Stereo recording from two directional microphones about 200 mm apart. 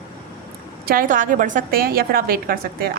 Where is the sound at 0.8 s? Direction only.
45° right (ahead or behind).